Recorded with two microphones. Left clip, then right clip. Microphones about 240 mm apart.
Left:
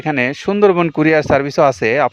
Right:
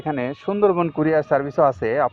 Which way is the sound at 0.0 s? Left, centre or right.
Left.